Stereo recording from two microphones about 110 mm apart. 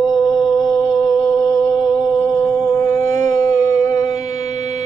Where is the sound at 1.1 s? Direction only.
30° left (ahead or behind).